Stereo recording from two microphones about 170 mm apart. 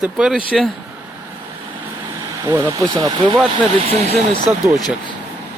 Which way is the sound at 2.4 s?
15° right (ahead or behind).